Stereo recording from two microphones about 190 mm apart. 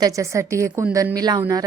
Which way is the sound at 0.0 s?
15° right (ahead or behind).